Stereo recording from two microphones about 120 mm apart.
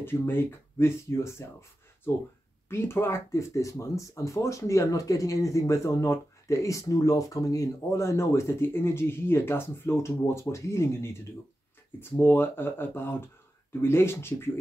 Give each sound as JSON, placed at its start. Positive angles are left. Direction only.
{"t": 0.0, "sound": "speech", "side_deg": 20}
{"t": 2.7, "sound": "speech", "side_deg": 20}